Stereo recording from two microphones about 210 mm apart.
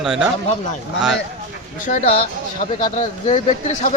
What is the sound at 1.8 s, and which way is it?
Speech, 35° left (ahead or behind).